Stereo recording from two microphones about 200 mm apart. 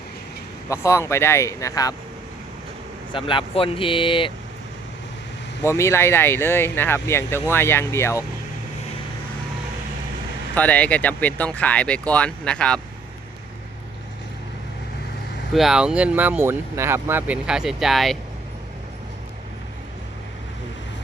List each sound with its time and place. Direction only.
0.7 s speech: 15° left (ahead or behind)
3.1 s speech: 25° left (ahead or behind)
5.6 s speech: 15° left (ahead or behind)
10.5 s speech: 10° left (ahead or behind)
15.5 s speech: centre (ahead or behind)